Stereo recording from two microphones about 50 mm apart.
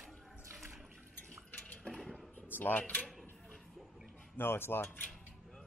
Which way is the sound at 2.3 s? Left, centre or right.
Left.